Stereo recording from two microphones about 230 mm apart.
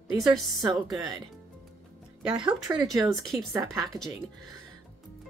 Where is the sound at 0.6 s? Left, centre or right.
Centre.